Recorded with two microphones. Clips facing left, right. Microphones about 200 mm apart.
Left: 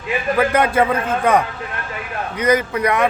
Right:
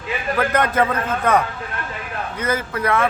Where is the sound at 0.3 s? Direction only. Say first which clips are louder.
Left 2 dB; 10° left (ahead or behind).